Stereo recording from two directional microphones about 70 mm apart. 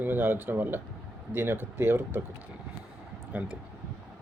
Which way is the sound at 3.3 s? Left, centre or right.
Right.